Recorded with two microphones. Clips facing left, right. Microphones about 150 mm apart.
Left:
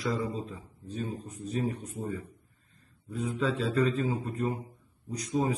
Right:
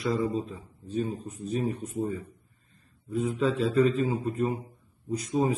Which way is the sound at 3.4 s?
5° right (ahead or behind).